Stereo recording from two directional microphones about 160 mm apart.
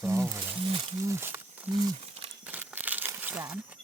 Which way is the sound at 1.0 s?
15° right (ahead or behind).